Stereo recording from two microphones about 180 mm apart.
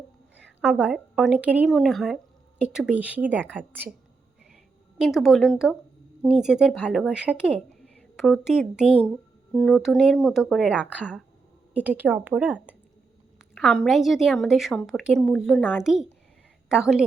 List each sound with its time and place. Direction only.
0.3 s speech: 5° right (ahead or behind)
4.9 s speech: centre (ahead or behind)
13.5 s speech: 5° left (ahead or behind)